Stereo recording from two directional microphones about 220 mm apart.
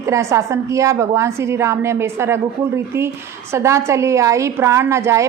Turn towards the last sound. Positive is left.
turn(degrees=-10)  # may be behind; listen again after turning